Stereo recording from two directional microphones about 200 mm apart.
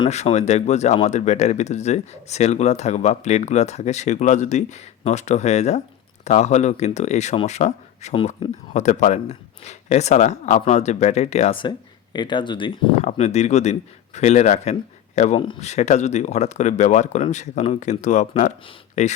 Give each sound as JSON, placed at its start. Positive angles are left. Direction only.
{"t": 0.0, "sound": "speech", "side_deg": 35}